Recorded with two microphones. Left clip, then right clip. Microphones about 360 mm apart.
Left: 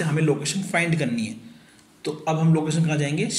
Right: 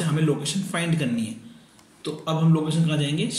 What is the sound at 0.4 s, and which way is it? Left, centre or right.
Speech, centre.